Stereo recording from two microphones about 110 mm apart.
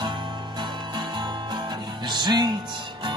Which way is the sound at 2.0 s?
40° right (ahead or behind).